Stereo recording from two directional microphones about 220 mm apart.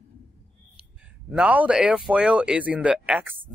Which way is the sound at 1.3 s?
5° right (ahead or behind).